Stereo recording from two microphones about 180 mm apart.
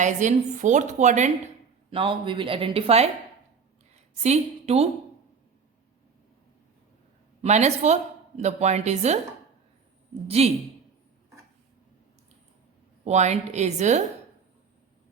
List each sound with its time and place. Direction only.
0.0 s a woman's voice: 40° right (ahead or behind)
1.9 s speech: 30° right (ahead or behind)
4.2 s a woman's voice: 35° right (ahead or behind)
7.4 s a woman's voice: 40° right (ahead or behind)
10.2 s a woman's voice: 35° right (ahead or behind)
13.1 s a woman's voice: 40° right (ahead or behind)